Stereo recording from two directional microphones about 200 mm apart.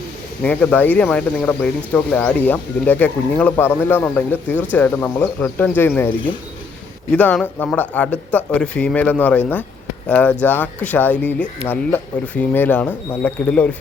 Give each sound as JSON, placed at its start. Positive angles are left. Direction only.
{"t": 0.4, "sound": "speech", "side_deg": 5}
{"t": 7.1, "sound": "speech", "side_deg": 5}